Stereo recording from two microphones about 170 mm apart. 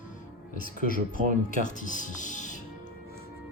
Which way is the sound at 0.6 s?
55° left (ahead or behind).